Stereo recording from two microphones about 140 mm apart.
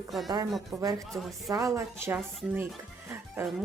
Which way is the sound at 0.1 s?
Centre (ahead or behind).